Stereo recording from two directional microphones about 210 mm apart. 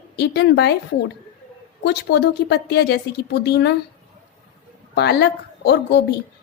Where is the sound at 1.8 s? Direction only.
50° left (ahead or behind).